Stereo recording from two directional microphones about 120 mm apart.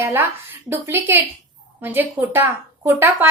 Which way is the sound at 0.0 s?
20° right (ahead or behind).